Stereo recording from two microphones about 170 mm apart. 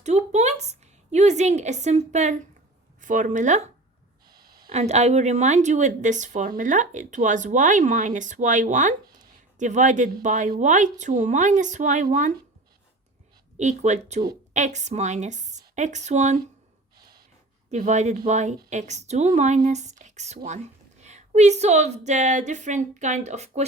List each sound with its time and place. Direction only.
0.0 s a sound: 40° right (ahead or behind)
3.0 s speech: 50° right (ahead or behind)
4.3 s a sound: 65° right (ahead or behind)
4.7 s speech: 40° right (ahead or behind)
13.6 s speech: 45° right (ahead or behind)
17.7 s speech: 45° right (ahead or behind)